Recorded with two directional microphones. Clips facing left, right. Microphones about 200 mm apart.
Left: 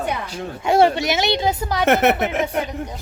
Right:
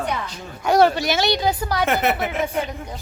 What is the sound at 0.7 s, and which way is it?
A woman's voice, 25° left (ahead or behind).